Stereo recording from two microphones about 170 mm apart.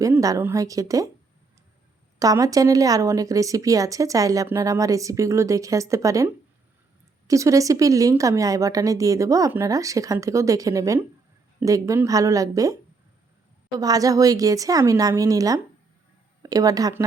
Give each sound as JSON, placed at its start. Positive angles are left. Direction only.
{"t": 0.0, "sound": "a woman's voice", "side_deg": -20}
{"t": 2.1, "sound": "a woman's voice", "side_deg": -20}
{"t": 13.7, "sound": "a woman's voice", "side_deg": -20}